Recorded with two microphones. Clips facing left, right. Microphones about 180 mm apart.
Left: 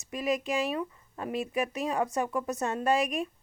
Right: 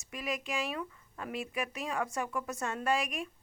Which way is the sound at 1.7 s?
20° left (ahead or behind).